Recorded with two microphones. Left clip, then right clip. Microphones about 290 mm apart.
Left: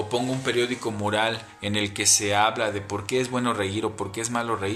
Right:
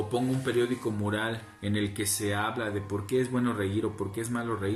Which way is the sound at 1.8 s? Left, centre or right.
Left.